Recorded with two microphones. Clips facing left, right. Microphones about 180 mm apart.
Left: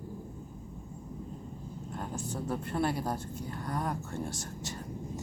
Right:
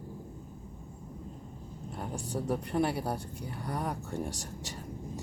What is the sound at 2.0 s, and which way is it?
Speech, 15° right (ahead or behind).